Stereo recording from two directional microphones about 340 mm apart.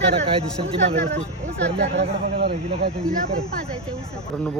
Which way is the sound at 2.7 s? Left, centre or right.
Centre.